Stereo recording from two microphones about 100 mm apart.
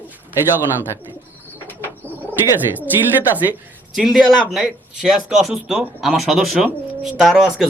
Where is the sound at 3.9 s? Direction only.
5° right (ahead or behind).